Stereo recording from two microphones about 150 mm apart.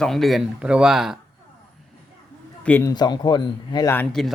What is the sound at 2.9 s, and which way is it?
Speech, 30° left (ahead or behind).